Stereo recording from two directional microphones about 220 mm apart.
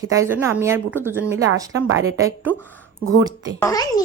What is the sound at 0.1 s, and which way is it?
Speech, 10° right (ahead or behind).